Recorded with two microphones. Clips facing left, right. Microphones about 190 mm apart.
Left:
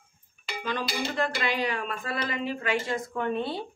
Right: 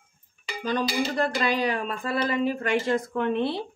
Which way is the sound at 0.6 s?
35° right (ahead or behind).